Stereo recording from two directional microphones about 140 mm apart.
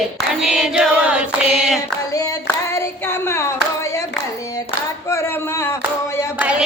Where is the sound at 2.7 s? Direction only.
20° left (ahead or behind).